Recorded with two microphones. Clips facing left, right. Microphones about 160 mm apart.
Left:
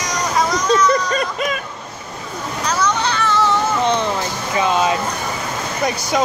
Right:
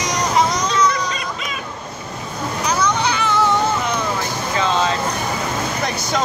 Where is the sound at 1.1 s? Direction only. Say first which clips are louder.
Left 7 dB; 50° left (ahead or behind).